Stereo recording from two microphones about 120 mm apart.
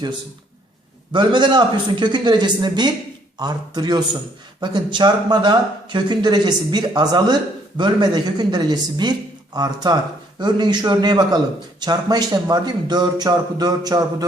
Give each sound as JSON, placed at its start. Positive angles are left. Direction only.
{"t": 1.1, "sound": "speech", "side_deg": -40}